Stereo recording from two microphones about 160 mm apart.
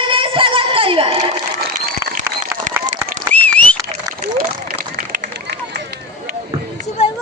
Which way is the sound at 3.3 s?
10° left (ahead or behind).